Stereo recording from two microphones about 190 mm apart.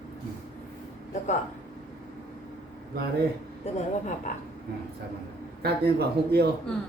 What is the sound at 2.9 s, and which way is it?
Speech, 55° right (ahead or behind).